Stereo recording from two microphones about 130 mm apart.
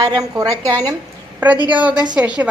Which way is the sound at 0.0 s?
30° right (ahead or behind).